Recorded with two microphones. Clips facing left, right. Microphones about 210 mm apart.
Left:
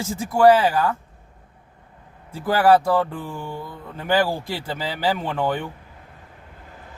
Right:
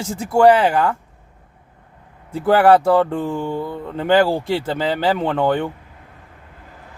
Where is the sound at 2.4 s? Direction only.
70° right (ahead or behind).